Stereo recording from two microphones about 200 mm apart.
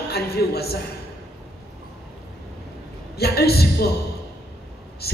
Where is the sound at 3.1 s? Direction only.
50° left (ahead or behind).